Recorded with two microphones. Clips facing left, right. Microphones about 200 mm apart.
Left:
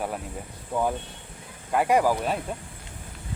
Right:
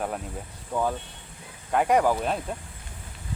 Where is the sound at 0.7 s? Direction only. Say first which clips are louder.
Left 1 dB; 10° left (ahead or behind).